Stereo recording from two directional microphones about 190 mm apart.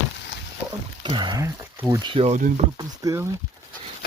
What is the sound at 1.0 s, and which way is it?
Speech, 25° right (ahead or behind).